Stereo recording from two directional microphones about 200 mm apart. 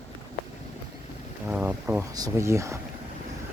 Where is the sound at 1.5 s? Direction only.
5° right (ahead or behind).